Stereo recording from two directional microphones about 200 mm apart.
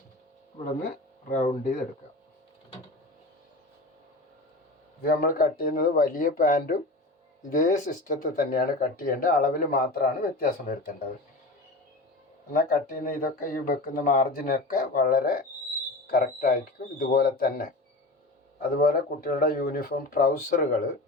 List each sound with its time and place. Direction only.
0.9 s speech: 40° left (ahead or behind)
5.0 s speech: 45° left (ahead or behind)
12.5 s speech: 45° left (ahead or behind)